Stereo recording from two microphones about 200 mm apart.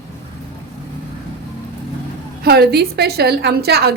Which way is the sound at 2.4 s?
55° right (ahead or behind).